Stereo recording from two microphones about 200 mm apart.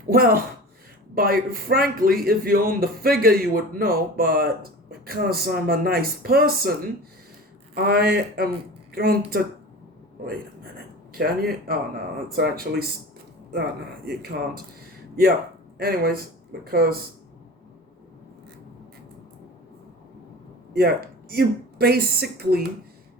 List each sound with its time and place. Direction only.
0.1 s speech: 45° right (ahead or behind)
7.8 s speech: 50° right (ahead or behind)
14.0 s speech: 50° right (ahead or behind)
15.8 s speech: 50° right (ahead or behind)
20.7 s speech: 50° right (ahead or behind)